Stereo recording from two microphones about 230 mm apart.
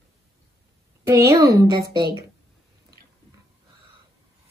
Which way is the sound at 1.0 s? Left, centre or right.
Centre.